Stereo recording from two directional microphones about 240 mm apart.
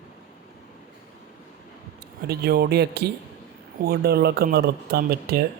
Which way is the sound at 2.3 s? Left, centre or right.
Right.